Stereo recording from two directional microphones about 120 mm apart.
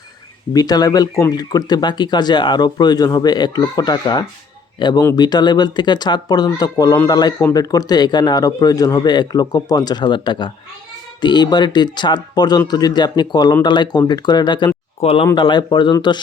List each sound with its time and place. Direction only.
0.5 s speech: 35° left (ahead or behind)
15.0 s speech: 50° left (ahead or behind)
15.4 s speech: 40° left (ahead or behind)